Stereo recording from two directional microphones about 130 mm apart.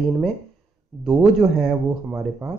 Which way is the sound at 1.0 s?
5° right (ahead or behind).